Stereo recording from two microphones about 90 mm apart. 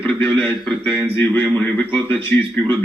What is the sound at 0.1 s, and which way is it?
Speech, 10° left (ahead or behind).